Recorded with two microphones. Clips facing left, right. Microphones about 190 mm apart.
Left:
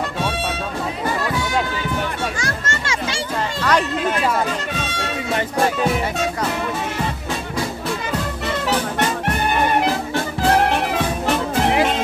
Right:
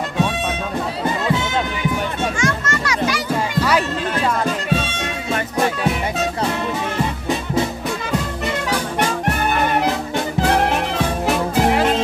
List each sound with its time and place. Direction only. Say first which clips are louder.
1.0 s music: right 2 dB; 20° right (ahead or behind)
2.4 s music: right 5 dB; 30° left (ahead or behind)